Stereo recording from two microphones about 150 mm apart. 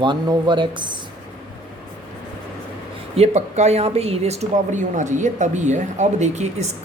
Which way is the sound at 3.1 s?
45° right (ahead or behind).